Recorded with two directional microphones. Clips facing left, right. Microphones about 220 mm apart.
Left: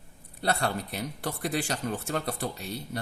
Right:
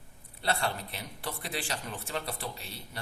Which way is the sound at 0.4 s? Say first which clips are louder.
Left 3 dB; 45° left (ahead or behind).